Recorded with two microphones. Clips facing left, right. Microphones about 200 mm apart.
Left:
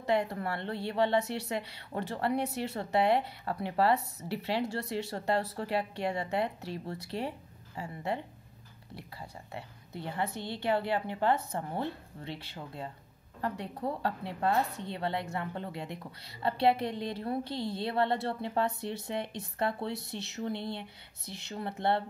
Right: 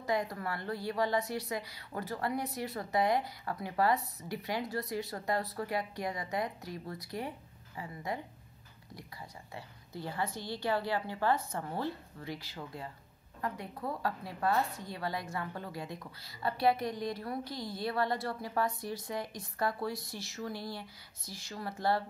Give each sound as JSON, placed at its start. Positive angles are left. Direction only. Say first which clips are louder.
{"t": 0.0, "sound": "a woman's voice", "louder": "left 4 dB", "side_deg": 30}
{"t": 9.5, "sound": "a woman's voice", "louder": "left 3 dB", "side_deg": 25}